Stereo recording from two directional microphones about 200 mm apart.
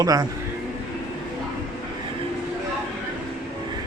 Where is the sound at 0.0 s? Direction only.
20° right (ahead or behind).